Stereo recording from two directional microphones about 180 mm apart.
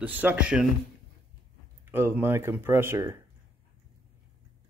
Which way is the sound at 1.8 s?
10° right (ahead or behind).